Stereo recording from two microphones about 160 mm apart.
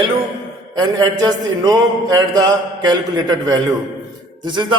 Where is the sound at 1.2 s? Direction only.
25° right (ahead or behind).